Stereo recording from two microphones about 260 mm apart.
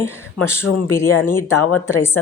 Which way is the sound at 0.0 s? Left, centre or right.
Centre.